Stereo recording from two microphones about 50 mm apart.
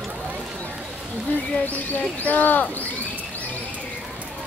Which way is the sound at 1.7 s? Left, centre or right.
Left.